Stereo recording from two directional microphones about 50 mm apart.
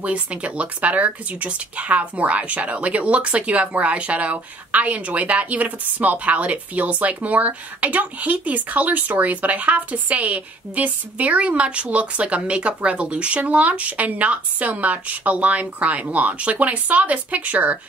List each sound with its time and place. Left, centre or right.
0.0 s speech: right